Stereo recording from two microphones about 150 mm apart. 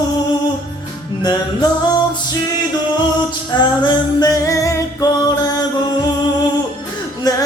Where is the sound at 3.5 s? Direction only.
30° left (ahead or behind).